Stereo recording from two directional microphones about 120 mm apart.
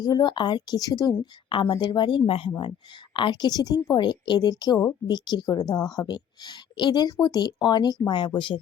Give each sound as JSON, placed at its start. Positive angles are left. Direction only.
{"t": 0.0, "sound": "a woman's voice", "side_deg": 35}